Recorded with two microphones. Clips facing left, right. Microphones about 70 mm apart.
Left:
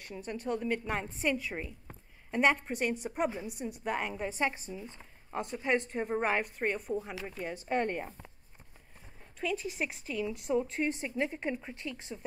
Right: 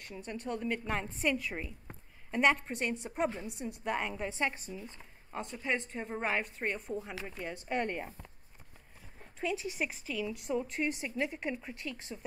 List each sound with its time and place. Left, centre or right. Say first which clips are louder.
0.0 s a woman's voice: left 3 dB; centre
7.5 s a woman's voice: left 3 dB; left
7.9 s a woman's voice: left 2 dB; centre
9.4 s a woman's voice: left 1 dB; centre
10.7 s a woman's voice: left 2 dB; left
11.9 s a woman's voice: left 1 dB; centre